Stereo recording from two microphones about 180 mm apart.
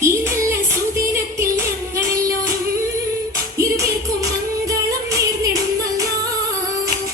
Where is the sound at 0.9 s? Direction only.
15° right (ahead or behind).